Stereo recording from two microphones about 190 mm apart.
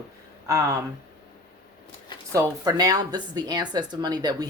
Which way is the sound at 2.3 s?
15° right (ahead or behind).